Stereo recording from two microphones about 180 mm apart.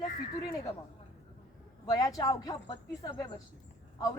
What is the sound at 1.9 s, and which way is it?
A woman's voice, 20° left (ahead or behind).